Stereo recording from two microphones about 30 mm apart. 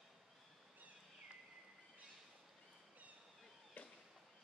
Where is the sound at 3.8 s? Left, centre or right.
Left.